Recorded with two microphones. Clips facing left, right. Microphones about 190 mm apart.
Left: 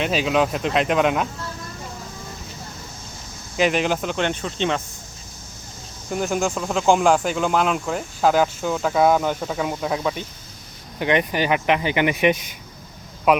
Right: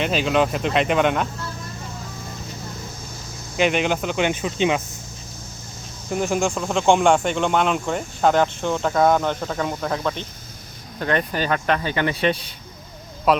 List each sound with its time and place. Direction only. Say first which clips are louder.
0.0 s speech: even; centre (ahead or behind)
3.6 s speech: even; centre (ahead or behind)
6.1 s speech: right 1 dB; centre (ahead or behind)